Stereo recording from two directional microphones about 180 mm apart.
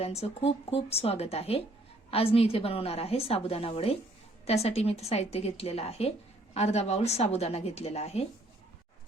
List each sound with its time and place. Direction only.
0.0 s a woman's voice: 35° left (ahead or behind)